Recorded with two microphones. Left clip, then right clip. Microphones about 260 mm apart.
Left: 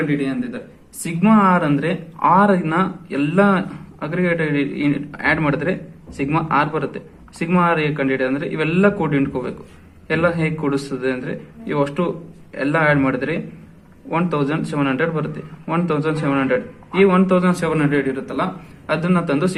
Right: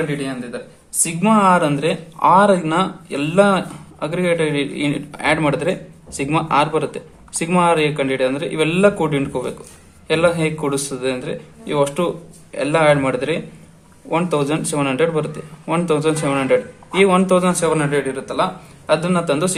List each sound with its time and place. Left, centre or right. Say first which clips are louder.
0.1 s a man's voice: left 2 dB; centre